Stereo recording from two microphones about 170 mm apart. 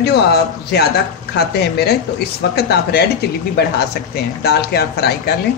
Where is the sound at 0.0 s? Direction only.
75° left (ahead or behind).